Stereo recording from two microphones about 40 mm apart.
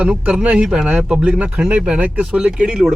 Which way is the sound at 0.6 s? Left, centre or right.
Right.